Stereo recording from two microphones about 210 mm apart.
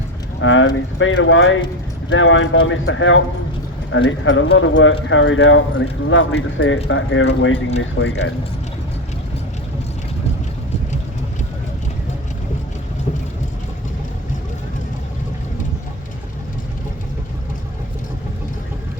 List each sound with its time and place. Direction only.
0.4 s clip-clop: 65° left (ahead or behind)
0.9 s speech: 65° left (ahead or behind)